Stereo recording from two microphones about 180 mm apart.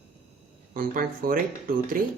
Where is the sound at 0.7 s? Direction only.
50° right (ahead or behind).